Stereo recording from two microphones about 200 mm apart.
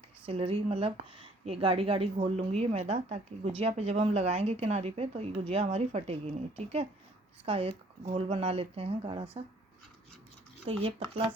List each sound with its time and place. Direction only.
0.3 s a woman's voice: 30° right (ahead or behind)
10.7 s speech: 30° right (ahead or behind)